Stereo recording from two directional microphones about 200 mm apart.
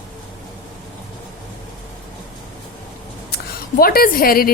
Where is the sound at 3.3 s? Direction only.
50° left (ahead or behind).